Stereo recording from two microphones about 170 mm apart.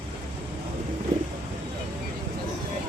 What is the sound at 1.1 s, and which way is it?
Vehicle, 20° right (ahead or behind).